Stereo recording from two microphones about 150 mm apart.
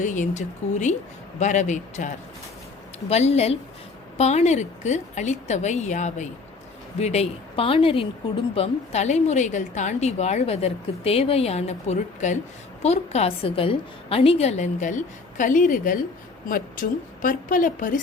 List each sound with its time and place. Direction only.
0.0 s a woman's voice: 55° left (ahead or behind)